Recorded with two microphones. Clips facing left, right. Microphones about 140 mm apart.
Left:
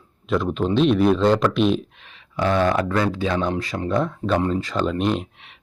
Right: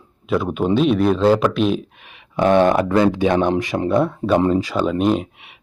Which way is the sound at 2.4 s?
25° right (ahead or behind).